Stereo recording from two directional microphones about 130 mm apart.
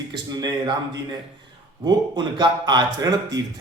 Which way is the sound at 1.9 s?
35° right (ahead or behind).